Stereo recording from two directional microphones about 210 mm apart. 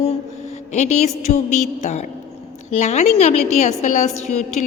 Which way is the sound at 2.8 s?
30° left (ahead or behind).